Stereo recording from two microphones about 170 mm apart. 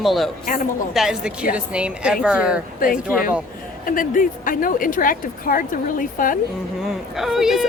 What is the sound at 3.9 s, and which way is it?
Speech, 55° left (ahead or behind).